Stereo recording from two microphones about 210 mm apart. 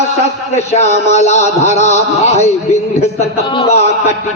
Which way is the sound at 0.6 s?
30° left (ahead or behind).